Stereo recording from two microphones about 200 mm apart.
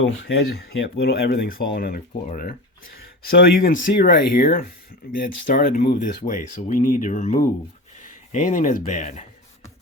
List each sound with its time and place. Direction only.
0.0 s speech: 65° left (ahead or behind); by 9.2 s 40° left (ahead or behind)